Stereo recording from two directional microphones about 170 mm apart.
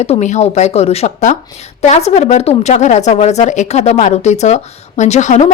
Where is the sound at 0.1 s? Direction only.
40° left (ahead or behind).